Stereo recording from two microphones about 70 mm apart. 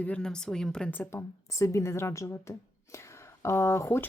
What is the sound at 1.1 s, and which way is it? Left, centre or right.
Speech, left.